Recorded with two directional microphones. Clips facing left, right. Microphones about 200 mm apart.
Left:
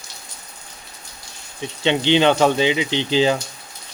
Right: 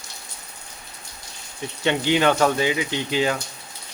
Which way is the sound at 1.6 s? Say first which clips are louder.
Left 3 dB; 25° left (ahead or behind).